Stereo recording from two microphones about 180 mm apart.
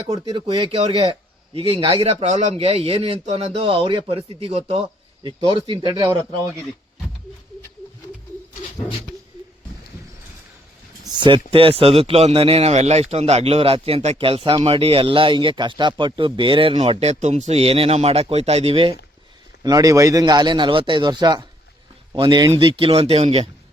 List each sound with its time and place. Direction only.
0.1 s a man's voice: 30° right (ahead or behind)
11.0 s a man's voice: 25° right (ahead or behind)
19.6 s a man's voice: 20° right (ahead or behind)